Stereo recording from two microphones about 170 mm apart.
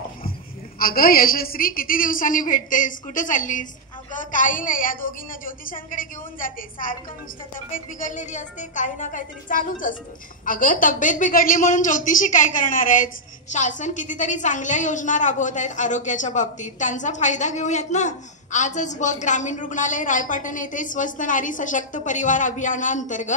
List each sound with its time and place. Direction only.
0.7 s a woman's voice: 60° left (ahead or behind)